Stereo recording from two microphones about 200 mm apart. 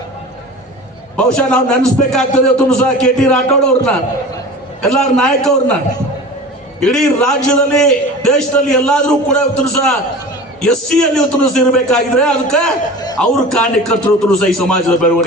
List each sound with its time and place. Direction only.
1.1 s a man's voice: 5° left (ahead or behind)
6.7 s a man's voice: centre (ahead or behind)